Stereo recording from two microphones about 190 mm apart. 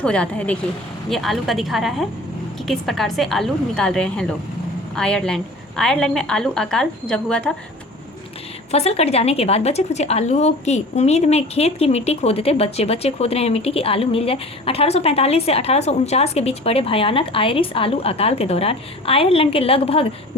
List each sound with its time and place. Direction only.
0.0 s a woman's voice: 5° left (ahead or behind)
8.7 s a woman's voice: 30° left (ahead or behind)